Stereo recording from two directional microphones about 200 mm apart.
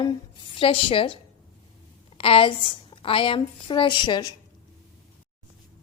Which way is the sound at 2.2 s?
25° left (ahead or behind).